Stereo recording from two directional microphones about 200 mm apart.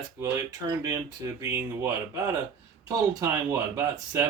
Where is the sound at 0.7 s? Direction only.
20° right (ahead or behind).